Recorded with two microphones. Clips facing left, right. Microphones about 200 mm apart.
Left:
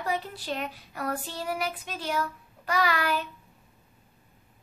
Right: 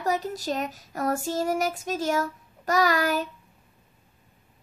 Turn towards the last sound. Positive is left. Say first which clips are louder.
# right 4 dB
turn(degrees=-40)  # may be behind; listen again after turning